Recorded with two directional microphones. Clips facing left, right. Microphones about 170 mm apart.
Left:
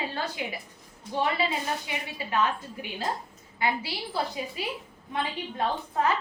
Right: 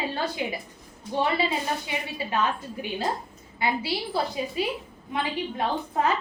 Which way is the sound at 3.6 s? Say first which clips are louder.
Right 2 dB; 30° right (ahead or behind).